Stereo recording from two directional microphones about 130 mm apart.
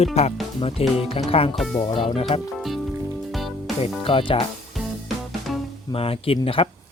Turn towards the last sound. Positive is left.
turn(degrees=45)  # may be behind; listen again after turning